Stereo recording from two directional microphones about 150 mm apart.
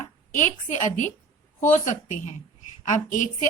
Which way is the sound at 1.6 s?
55° left (ahead or behind).